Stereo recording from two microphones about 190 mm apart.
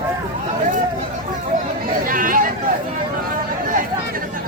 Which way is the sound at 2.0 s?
45° right (ahead or behind).